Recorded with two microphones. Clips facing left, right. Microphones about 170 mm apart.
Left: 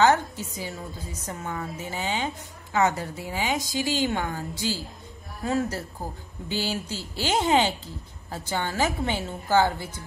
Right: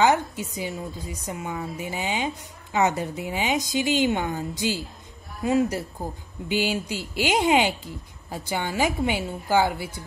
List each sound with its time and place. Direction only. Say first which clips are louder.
0.0 s a woman's voice: even; 15° right (ahead or behind)